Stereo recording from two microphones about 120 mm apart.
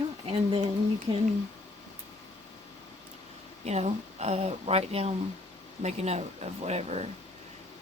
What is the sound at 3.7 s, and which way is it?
Speech, 65° right (ahead or behind).